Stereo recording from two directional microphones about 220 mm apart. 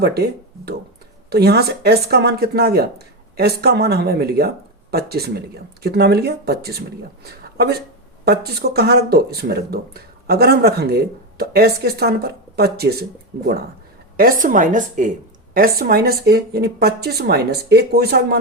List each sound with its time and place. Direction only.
0.0 s speech: 45° right (ahead or behind)
8.2 s a woman's voice: 45° right (ahead or behind)